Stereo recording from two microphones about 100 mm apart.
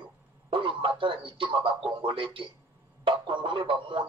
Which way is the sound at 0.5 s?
55° right (ahead or behind).